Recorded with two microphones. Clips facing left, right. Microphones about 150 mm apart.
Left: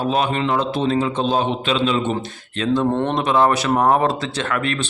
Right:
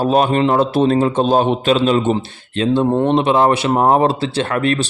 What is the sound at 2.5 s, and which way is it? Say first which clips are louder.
Speech: right 3 dB; 30° right (ahead or behind).